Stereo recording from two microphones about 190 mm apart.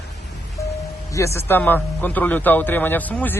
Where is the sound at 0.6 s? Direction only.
15° left (ahead or behind).